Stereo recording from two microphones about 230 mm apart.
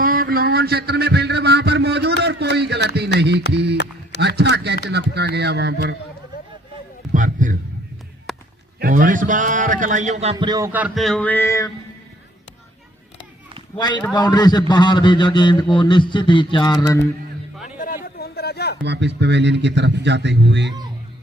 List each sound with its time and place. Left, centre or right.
0.0 s a man's voice: right
7.1 s speech: right
8.3 s a sound: centre
8.8 s a man's voice: right
10.3 s speech: centre
13.7 s a man's voice: centre
17.7 s a sound: left
18.8 s a man's voice: right